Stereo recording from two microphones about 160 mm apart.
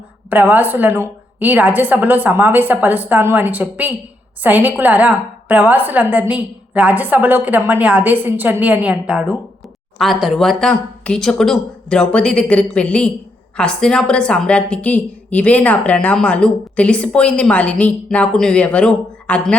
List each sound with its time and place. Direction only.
0.3 s a woman's voice: 10° right (ahead or behind); by 19.5 s 5° left (ahead or behind)